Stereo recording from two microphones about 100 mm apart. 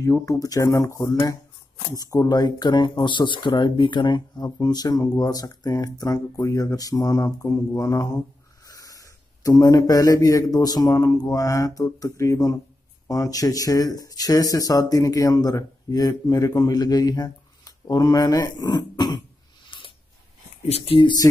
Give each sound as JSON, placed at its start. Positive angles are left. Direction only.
{"t": 0.0, "sound": "speech", "side_deg": 30}
{"t": 4.6, "sound": "a man's voice", "side_deg": 40}
{"t": 19.7, "sound": "a sound", "side_deg": 55}
{"t": 20.6, "sound": "speech", "side_deg": 80}